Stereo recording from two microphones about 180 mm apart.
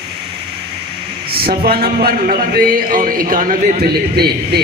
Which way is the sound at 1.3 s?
55° right (ahead or behind).